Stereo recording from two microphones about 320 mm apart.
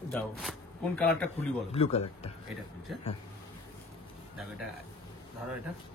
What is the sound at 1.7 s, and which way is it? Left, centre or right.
Speech, centre.